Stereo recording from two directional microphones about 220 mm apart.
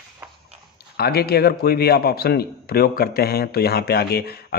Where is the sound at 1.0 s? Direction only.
45° left (ahead or behind).